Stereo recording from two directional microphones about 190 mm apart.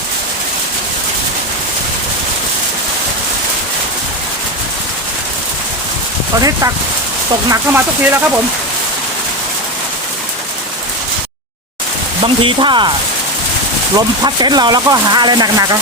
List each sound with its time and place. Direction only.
7.5 s speech: 10° right (ahead or behind)
12.2 s speech: 25° right (ahead or behind)
13.9 s speech: 20° right (ahead or behind)